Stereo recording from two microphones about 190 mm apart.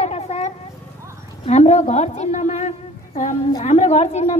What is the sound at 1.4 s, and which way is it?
A woman's voice, 35° left (ahead or behind).